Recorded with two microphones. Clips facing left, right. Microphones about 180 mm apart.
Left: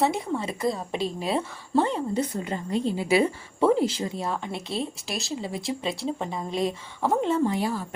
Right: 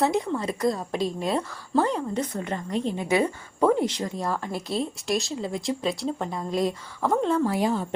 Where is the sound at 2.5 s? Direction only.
35° left (ahead or behind).